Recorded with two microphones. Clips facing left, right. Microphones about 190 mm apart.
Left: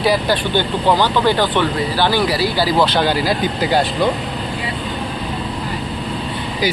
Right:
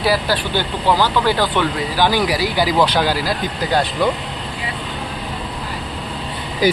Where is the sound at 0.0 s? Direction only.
5° right (ahead or behind).